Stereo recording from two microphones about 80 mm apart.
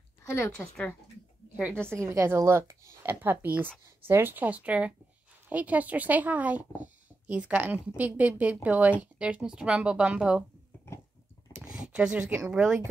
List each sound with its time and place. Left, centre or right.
0.2 s speech: left
2.0 s a woman's voice: right; by 10.4 s centre
11.5 s a sound: centre
12.4 s speech: centre